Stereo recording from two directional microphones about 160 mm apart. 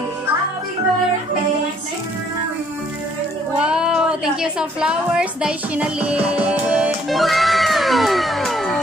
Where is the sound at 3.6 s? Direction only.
5° right (ahead or behind).